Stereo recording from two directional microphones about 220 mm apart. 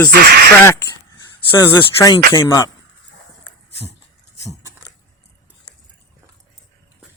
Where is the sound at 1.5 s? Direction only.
10° left (ahead or behind).